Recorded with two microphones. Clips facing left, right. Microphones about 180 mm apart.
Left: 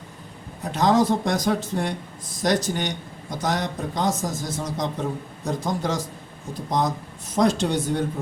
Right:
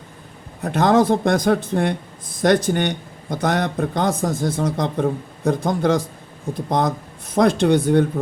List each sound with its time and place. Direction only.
0.6 s speech: 55° right (ahead or behind)